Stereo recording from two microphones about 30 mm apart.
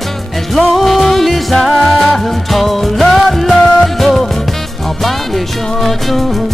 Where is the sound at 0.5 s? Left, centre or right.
Centre.